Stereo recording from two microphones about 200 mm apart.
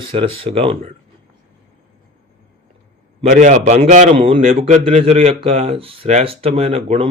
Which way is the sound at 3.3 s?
40° right (ahead or behind).